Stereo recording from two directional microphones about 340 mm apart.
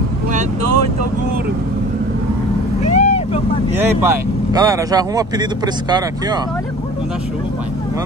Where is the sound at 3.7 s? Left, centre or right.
Centre.